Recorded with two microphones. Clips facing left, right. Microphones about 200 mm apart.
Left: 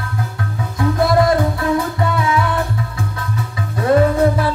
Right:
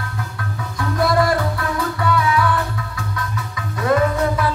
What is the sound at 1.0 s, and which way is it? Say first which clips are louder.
Music: left 3 dB; 25° left (ahead or behind).